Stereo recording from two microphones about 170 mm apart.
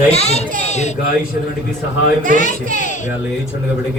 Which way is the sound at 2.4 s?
45° left (ahead or behind).